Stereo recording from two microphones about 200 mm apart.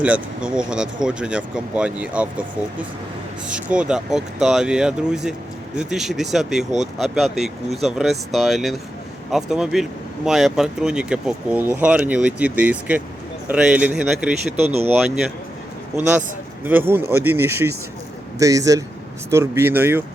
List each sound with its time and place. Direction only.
0.0 s speech: 5° right (ahead or behind)
3.5 s speech: 5° right (ahead or behind)
14.5 s speech: 30° right (ahead or behind)
14.8 s speech: centre (ahead or behind)
16.6 s speech: 10° right (ahead or behind)